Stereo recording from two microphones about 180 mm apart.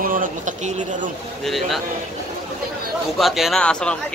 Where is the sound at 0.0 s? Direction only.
50° right (ahead or behind).